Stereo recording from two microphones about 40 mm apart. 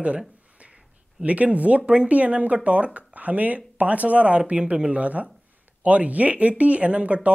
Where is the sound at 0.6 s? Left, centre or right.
Right.